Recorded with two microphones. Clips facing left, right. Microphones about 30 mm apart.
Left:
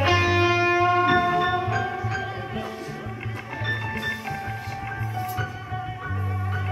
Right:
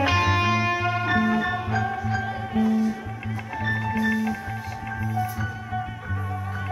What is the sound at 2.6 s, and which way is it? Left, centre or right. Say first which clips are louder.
Music: right 9 dB; left.